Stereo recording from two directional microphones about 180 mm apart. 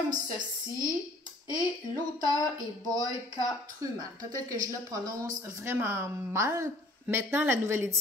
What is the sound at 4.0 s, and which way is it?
A woman's voice, 20° right (ahead or behind).